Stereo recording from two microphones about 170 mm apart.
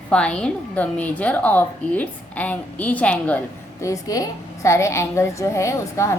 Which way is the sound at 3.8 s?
20° left (ahead or behind).